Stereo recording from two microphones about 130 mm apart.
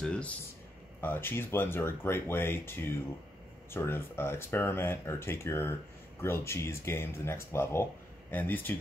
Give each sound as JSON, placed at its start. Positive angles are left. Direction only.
{"t": 0.0, "sound": "speech", "side_deg": 5}